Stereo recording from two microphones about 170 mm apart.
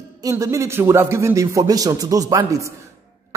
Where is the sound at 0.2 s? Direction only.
20° right (ahead or behind).